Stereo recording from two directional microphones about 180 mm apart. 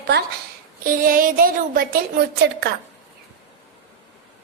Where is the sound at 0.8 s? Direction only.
55° right (ahead or behind).